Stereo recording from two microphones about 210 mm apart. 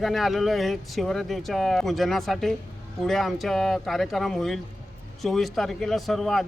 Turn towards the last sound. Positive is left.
turn(degrees=0)  # may be behind; listen again after turning